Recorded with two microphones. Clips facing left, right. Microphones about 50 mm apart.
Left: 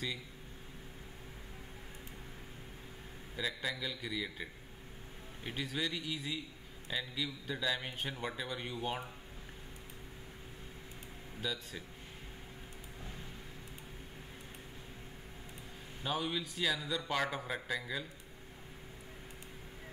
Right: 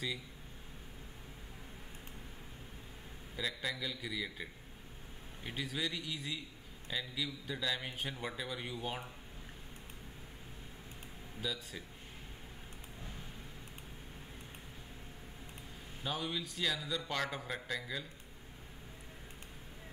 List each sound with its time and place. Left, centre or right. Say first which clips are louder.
3.3 s speech: left 1 dB; centre
11.4 s speech: left 1 dB; centre
16.0 s speech: left 2 dB; centre